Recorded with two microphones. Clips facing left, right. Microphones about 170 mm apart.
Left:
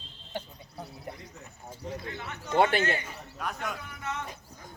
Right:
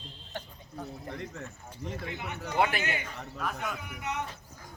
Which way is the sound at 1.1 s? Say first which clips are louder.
Right 8 dB; 70° right (ahead or behind).